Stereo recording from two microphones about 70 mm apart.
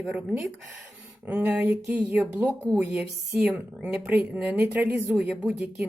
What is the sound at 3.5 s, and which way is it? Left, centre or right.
Speech, right.